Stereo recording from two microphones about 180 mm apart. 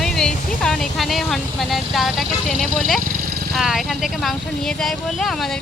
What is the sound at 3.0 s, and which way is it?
Vehicle, 50° right (ahead or behind).